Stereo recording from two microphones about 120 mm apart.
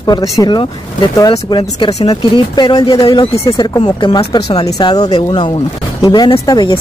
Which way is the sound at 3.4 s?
30° left (ahead or behind).